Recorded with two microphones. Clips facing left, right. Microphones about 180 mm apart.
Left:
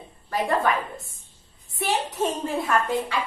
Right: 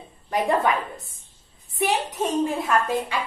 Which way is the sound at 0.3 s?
20° right (ahead or behind).